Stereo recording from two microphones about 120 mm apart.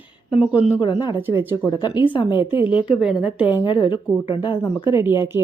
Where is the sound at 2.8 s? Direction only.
5° right (ahead or behind).